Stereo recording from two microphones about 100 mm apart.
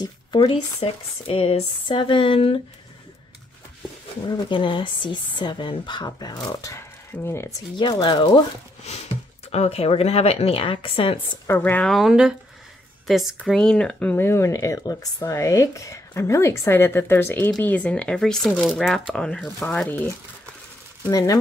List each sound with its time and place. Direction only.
0.0 s a sound: 40° left (ahead or behind)
0.5 s speech: 70° left (ahead or behind)
4.3 s speech: 55° left (ahead or behind)
6.7 s speech: 25° left (ahead or behind)
7.7 s speech: 50° left (ahead or behind)
8.8 s speech: 90° left; by 11.1 s 65° left (ahead or behind)
11.4 s speech: 20° left (ahead or behind)
11.9 s speech: 5° right (ahead or behind)
13.5 s speech: 10° left (ahead or behind)
21.1 s speech: 40° left (ahead or behind)